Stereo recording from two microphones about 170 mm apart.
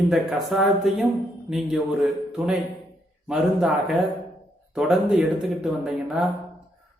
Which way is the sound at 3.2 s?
5° right (ahead or behind).